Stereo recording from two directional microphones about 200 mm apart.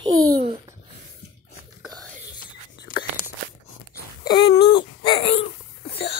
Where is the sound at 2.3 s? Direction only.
20° left (ahead or behind).